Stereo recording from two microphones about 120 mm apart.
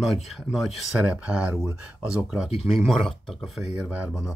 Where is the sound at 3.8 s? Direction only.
10° right (ahead or behind).